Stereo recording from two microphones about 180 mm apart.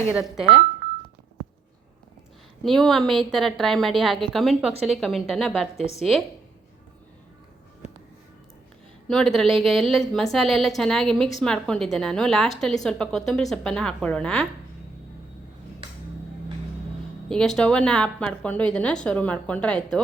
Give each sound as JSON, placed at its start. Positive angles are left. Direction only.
{"t": 0.1, "sound": "a woman's voice", "side_deg": -5}
{"t": 2.6, "sound": "a woman's voice", "side_deg": 0}
{"t": 4.7, "sound": "a woman's voice", "side_deg": -35}
{"t": 4.9, "sound": "a woman's voice", "side_deg": 0}
{"t": 9.0, "sound": "a woman's voice", "side_deg": 5}
{"t": 17.2, "sound": "a woman's voice", "side_deg": 5}